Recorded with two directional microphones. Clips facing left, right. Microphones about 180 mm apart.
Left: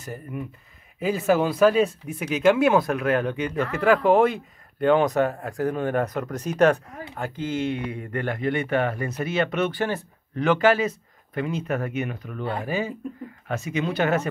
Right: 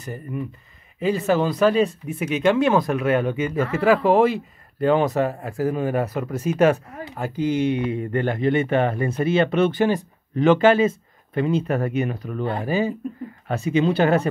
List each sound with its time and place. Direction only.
0.0 s speech: centre (ahead or behind); by 9.8 s 30° right (ahead or behind)
9.8 s speech: 15° right (ahead or behind)